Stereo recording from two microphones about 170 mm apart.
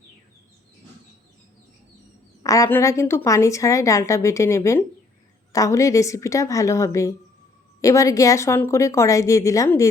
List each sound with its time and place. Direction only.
2.4 s a woman's voice: 20° left (ahead or behind)